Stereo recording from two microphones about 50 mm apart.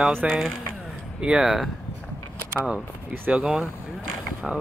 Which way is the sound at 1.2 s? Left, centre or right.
Centre.